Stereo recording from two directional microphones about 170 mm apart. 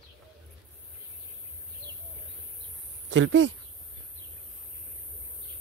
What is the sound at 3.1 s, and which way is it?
Speech, 90° right.